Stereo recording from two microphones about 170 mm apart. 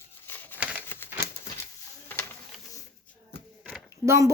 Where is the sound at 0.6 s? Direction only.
5° right (ahead or behind).